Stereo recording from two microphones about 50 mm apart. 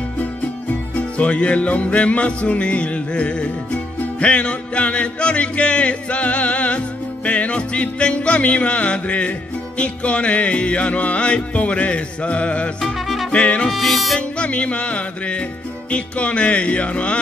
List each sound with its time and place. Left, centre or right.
0.9 s music: left
13.7 s music: centre
14.1 s music: left